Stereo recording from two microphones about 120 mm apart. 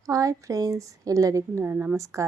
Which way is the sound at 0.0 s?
30° right (ahead or behind).